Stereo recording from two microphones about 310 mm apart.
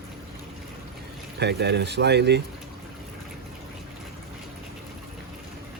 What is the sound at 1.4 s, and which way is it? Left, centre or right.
Speech, right.